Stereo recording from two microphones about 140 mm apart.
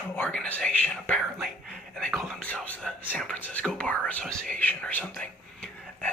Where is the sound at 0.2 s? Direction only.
10° left (ahead or behind).